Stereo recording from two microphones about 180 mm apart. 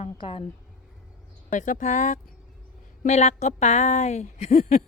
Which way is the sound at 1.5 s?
45° left (ahead or behind).